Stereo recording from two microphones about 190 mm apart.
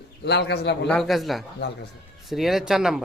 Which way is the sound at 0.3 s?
60° left (ahead or behind).